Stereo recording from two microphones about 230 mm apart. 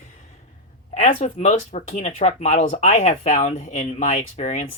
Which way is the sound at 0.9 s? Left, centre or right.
Left.